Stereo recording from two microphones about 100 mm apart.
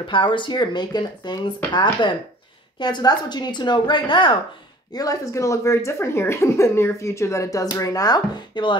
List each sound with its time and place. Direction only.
0.0 s speech: 55° left (ahead or behind)
4.9 s speech: 35° left (ahead or behind)